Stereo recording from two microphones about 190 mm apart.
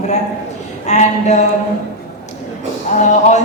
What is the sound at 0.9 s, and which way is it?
Speech, 35° left (ahead or behind).